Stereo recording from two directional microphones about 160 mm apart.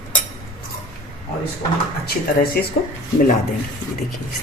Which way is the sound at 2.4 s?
70° left (ahead or behind).